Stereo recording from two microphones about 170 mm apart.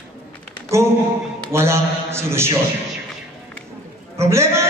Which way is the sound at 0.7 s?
15° right (ahead or behind).